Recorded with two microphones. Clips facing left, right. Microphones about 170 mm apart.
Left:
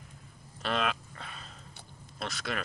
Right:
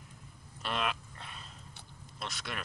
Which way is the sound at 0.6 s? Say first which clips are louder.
Left 4 dB; 90° left.